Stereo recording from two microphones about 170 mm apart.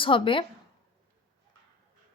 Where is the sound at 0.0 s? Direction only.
30° left (ahead or behind).